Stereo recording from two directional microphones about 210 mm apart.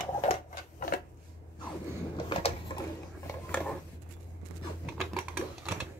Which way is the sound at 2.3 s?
25° left (ahead or behind).